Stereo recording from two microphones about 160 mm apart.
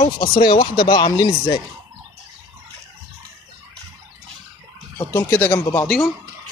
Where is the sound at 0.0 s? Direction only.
30° left (ahead or behind).